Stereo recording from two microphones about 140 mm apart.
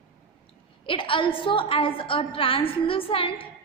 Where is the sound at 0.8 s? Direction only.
35° left (ahead or behind).